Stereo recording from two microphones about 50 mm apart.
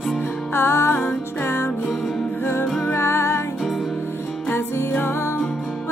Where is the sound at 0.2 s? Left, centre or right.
Left.